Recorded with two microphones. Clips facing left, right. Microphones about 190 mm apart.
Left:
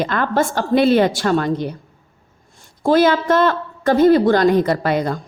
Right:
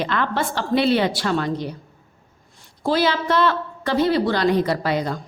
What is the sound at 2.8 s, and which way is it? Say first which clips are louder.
A woman's voice: left 6 dB; 50° left (ahead or behind).